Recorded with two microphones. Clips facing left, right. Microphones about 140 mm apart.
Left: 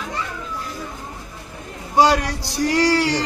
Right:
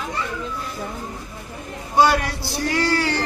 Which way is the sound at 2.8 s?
15° left (ahead or behind).